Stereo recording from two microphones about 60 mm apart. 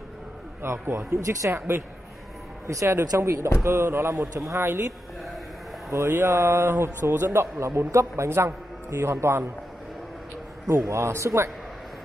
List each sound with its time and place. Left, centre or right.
0.6 s a man's voice: right
2.6 s a man's voice: right
5.9 s a man's voice: right
10.7 s a man's voice: right